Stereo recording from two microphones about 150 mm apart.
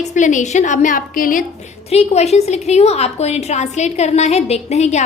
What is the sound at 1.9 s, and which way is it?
A woman's voice, 45° left (ahead or behind).